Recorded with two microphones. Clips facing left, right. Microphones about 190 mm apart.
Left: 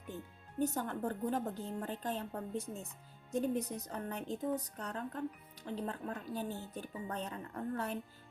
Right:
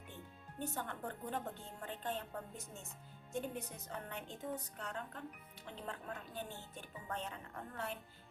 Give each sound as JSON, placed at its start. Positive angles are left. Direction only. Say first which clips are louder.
{"t": 0.6, "sound": "a woman's voice", "louder": "left 8 dB", "side_deg": 40}